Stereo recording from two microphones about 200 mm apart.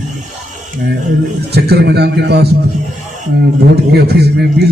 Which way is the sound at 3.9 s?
55° right (ahead or behind).